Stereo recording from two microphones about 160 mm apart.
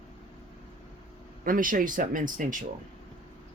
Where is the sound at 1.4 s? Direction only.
60° right (ahead or behind).